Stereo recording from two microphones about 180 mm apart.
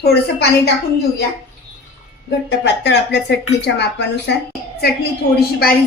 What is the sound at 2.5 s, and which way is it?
Speech, 70° left (ahead or behind).